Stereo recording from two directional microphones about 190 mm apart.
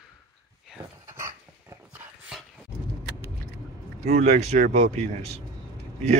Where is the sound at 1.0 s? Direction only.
15° right (ahead or behind).